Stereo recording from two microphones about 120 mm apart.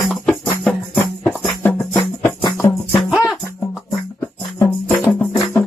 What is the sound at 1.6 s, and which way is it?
Music, 20° left (ahead or behind).